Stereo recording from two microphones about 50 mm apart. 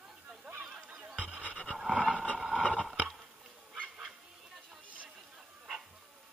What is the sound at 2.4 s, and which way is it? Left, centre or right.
Vehicle, centre.